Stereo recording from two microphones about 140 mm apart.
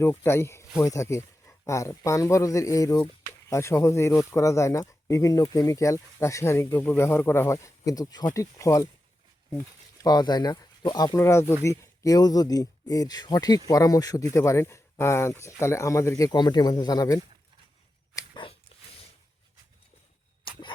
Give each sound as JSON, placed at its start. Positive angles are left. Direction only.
{"t": 0.0, "sound": "speech", "side_deg": 15}
{"t": 10.0, "sound": "speech", "side_deg": 30}
{"t": 18.2, "sound": "shuffling cards", "side_deg": 25}